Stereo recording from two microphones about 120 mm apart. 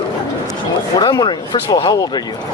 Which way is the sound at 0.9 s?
35° left (ahead or behind).